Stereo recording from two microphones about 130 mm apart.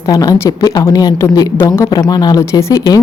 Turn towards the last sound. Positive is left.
turn(degrees=25)  # may be behind; listen again after turning